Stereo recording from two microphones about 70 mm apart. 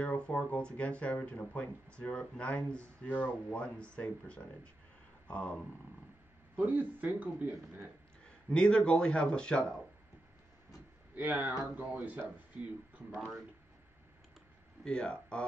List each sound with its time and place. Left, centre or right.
0.0 s speech: centre
6.5 s speech: right
8.5 s speech: centre
11.1 s speech: right
14.9 s speech: centre